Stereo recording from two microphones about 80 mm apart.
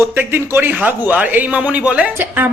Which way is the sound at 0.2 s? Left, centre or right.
Right.